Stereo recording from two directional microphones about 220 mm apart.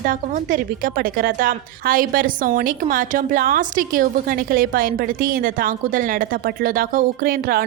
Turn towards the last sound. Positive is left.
turn(degrees=-40)  # may be behind; listen again after turning